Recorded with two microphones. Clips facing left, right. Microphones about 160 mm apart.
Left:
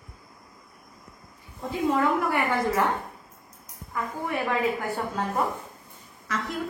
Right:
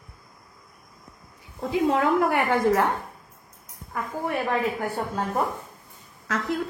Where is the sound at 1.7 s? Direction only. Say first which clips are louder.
Right 2 dB; 85° right.